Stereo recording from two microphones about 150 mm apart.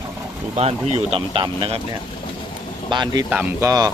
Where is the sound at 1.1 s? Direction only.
35° right (ahead or behind).